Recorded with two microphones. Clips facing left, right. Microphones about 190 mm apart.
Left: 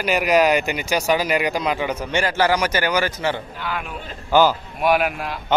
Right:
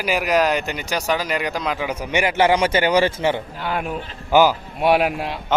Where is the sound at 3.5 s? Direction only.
35° right (ahead or behind).